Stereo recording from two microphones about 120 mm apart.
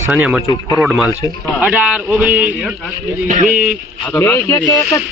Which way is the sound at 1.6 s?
15° right (ahead or behind).